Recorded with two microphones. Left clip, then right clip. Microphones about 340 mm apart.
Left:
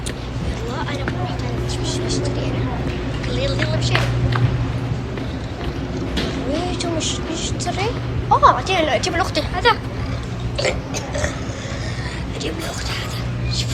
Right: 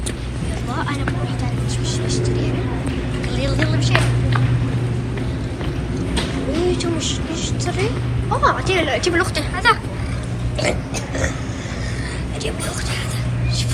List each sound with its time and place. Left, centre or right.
2.0 s vehicle: centre
3.3 s music: centre
8.3 s a sound: centre